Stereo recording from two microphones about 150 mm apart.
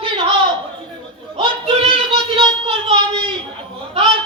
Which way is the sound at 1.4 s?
40° right (ahead or behind).